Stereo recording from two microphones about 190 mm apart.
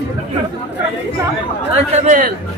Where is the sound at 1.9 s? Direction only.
45° right (ahead or behind).